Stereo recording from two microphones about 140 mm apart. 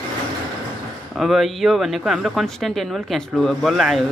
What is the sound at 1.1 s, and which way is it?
Speech, centre (ahead or behind).